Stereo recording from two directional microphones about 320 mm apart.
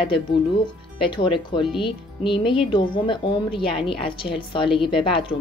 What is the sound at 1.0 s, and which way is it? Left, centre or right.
Speech, centre.